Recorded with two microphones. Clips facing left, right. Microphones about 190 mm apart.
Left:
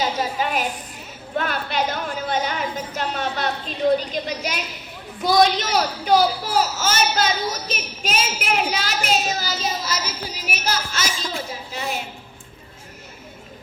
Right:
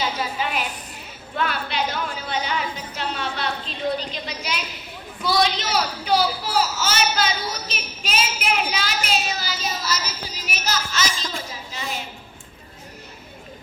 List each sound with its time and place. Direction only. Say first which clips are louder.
0.0 s music: left 3 dB; 45° left (ahead or behind)
1.4 s a child's voice: left 2 dB; 45° left (ahead or behind)
10.4 s a woman's voice: left 1 dB; 55° left (ahead or behind)
11.0 s speech: left 1 dB; 5° left (ahead or behind)